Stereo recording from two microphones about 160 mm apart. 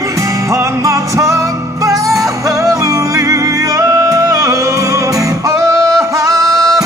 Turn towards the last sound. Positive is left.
turn(degrees=-20)  # may be behind; listen again after turning